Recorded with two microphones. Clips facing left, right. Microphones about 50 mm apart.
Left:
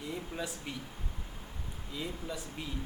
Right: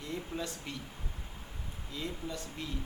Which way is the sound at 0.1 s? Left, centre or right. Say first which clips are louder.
Right 2 dB; centre.